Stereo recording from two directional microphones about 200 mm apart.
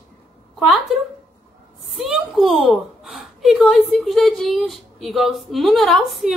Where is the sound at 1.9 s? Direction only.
Centre (ahead or behind).